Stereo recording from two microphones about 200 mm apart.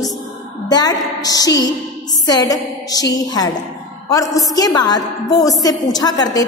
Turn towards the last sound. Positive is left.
turn(degrees=20)  # may be behind; listen again after turning